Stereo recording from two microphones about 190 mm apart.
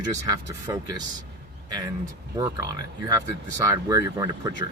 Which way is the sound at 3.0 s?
20° right (ahead or behind).